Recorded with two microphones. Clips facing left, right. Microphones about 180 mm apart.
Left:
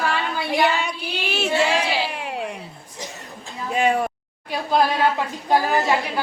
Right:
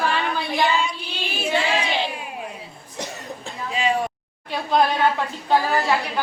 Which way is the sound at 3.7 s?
55° left (ahead or behind).